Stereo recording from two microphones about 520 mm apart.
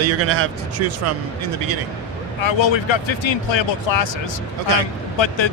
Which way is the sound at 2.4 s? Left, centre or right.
Left.